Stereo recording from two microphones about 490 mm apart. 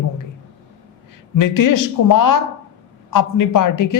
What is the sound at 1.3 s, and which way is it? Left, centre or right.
A man's voice, left.